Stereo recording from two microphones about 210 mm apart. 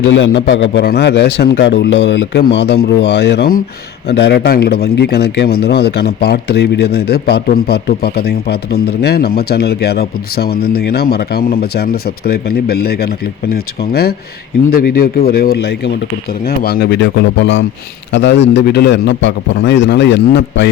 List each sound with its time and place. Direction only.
0.1 s a man's voice: 60° left (ahead or behind)